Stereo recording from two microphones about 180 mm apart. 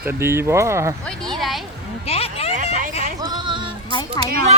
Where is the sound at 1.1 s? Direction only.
Centre (ahead or behind).